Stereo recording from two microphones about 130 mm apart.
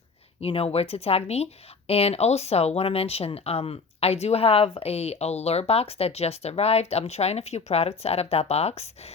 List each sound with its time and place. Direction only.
0.4 s speech: 50° left (ahead or behind)